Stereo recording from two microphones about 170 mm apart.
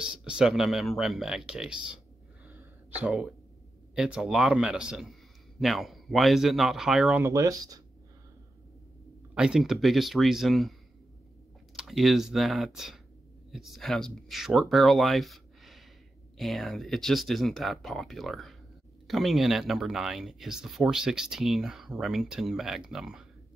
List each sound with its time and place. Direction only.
0.0 s speech: 5° right (ahead or behind)
2.4 s a sound: 10° right (ahead or behind)
3.9 s speech: 5° right (ahead or behind)
7.2 s speech: 20° right (ahead or behind)
9.3 s speech: 5° right (ahead or behind)
11.7 s speech: centre (ahead or behind)